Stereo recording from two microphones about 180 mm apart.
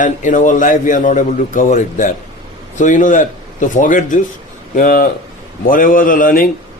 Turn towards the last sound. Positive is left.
turn(degrees=50)  # may be behind; listen again after turning